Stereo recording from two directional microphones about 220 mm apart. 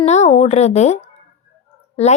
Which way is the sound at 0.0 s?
30° left (ahead or behind).